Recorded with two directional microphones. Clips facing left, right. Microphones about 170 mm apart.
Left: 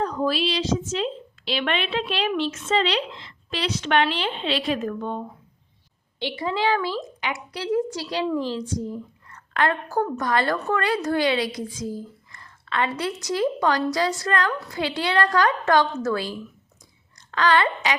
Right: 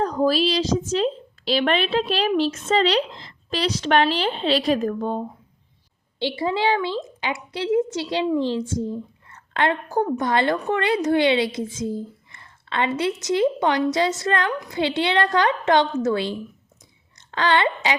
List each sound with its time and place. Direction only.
0.0 s a woman's voice: 40° right (ahead or behind)